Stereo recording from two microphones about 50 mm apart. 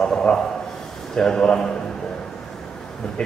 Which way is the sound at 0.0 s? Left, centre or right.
Centre.